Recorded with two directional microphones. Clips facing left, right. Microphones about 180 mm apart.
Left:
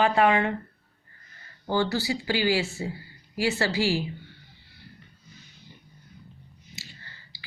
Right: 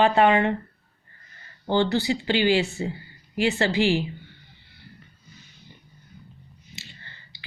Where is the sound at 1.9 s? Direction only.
20° right (ahead or behind).